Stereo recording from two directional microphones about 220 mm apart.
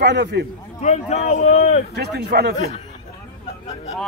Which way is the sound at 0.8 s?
30° left (ahead or behind).